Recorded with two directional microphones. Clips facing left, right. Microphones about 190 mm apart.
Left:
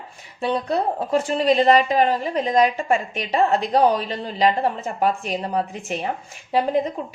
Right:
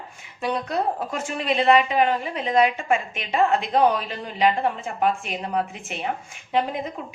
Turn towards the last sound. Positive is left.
turn(degrees=35)  # may be behind; listen again after turning